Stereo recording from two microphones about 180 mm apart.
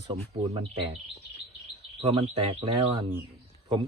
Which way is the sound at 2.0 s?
30° right (ahead or behind).